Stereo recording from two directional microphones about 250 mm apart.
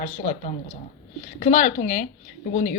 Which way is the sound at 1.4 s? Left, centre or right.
Left.